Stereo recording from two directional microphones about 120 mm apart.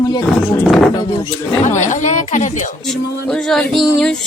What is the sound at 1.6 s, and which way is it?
A woman's voice, 90° left.